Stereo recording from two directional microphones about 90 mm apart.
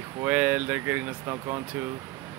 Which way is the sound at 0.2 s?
15° right (ahead or behind).